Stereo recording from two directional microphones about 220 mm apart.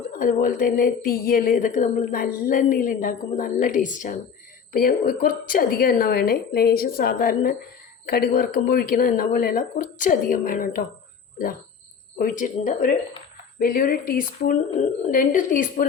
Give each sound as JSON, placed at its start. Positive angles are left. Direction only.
{"t": 0.2, "sound": "a woman's voice", "side_deg": 40}
{"t": 12.1, "sound": "a woman's voice", "side_deg": 35}